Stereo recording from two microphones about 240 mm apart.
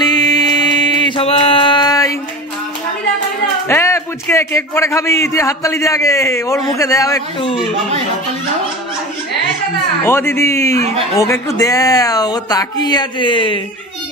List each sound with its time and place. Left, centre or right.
0.0 s mantra: centre
3.6 s a man's voice: centre
10.0 s a man's voice: centre